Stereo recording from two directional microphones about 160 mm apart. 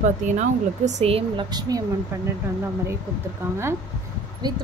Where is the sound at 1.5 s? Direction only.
25° right (ahead or behind).